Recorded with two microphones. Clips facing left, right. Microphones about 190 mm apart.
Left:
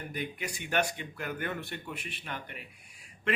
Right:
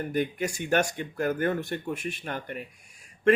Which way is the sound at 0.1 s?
45° right (ahead or behind).